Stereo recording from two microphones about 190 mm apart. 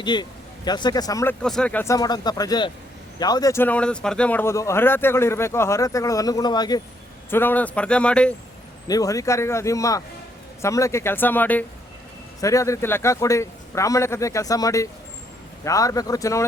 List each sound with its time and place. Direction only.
0.0 s speech: 20° left (ahead or behind)
7.3 s speech: 10° left (ahead or behind)
8.9 s speech: 20° left (ahead or behind)